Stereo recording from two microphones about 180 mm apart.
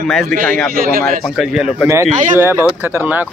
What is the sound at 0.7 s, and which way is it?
Speech, 50° right (ahead or behind).